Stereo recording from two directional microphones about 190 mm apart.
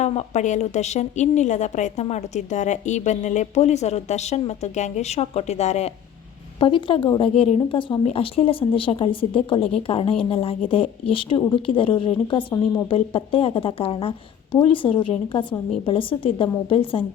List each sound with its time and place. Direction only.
0.0 s a woman's voice: 35° left (ahead or behind)